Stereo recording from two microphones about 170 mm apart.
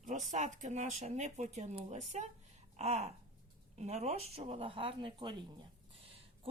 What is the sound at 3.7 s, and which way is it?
Speech, 40° right (ahead or behind).